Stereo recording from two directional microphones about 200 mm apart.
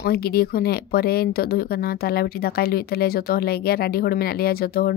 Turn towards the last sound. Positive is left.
turn(degrees=50)  # may be behind; listen again after turning